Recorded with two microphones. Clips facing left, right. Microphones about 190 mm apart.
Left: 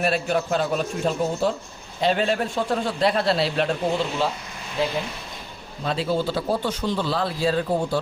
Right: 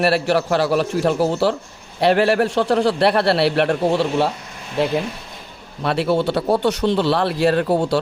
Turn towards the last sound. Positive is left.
turn(degrees=-75)  # may be behind; listen again after turning